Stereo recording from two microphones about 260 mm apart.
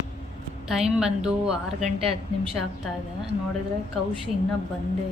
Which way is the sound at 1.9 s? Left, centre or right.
Right.